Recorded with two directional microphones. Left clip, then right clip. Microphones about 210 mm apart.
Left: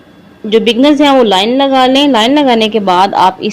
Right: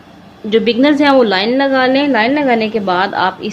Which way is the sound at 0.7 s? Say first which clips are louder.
Left 3 dB; 20° left (ahead or behind).